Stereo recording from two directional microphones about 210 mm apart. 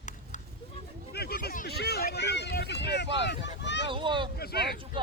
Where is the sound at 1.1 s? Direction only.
50° left (ahead or behind).